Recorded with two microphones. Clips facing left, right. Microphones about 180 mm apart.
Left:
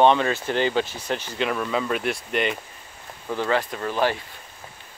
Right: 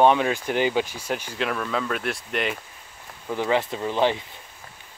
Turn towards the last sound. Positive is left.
turn(degrees=-20)  # may be behind; listen again after turning